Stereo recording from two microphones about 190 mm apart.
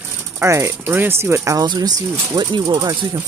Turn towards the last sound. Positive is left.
turn(degrees=-20)  # may be behind; listen again after turning